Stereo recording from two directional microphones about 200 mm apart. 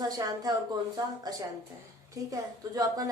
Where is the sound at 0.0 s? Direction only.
20° right (ahead or behind).